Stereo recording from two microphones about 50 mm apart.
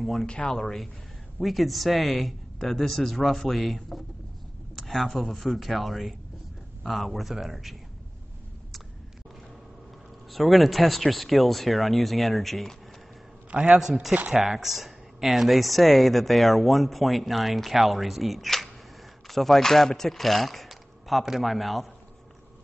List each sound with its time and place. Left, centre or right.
0.0 s speech: centre
0.3 s speech: centre
0.6 s a man's voice: centre
4.7 s a sound: centre
5.1 s speech: centre
10.3 s speech: centre
13.5 s a man's voice: right
14.4 s speech: centre